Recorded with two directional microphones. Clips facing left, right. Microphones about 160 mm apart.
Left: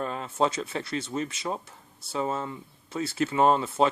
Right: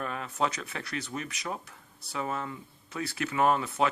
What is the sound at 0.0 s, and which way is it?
Speech, 30° left (ahead or behind).